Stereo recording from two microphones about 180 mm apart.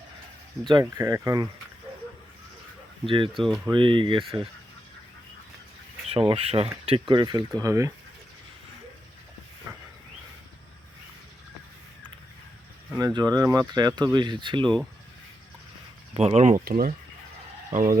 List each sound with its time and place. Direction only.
0.7 s speech: 20° right (ahead or behind)
3.1 s speech: 30° right (ahead or behind)
6.1 s speech: 30° right (ahead or behind)
9.7 s a sound: 15° right (ahead or behind)
13.0 s speech: 20° right (ahead or behind)
16.1 s speech: 35° right (ahead or behind)
16.6 s speech: 55° right (ahead or behind)